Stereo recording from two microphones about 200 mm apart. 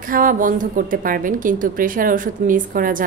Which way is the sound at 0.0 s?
45° right (ahead or behind).